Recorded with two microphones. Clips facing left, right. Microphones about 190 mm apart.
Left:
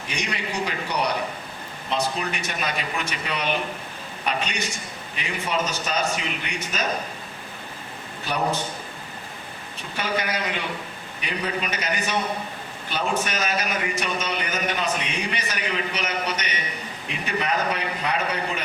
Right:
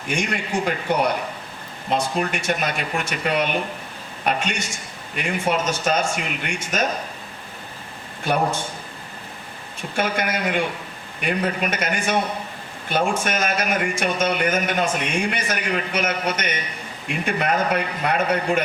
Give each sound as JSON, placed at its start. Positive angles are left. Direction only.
{"t": 0.1, "sound": "a man's voice", "side_deg": -50}
{"t": 10.0, "sound": "a man's voice", "side_deg": -50}